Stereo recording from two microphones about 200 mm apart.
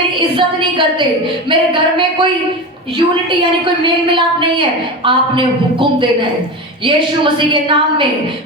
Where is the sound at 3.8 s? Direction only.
25° right (ahead or behind).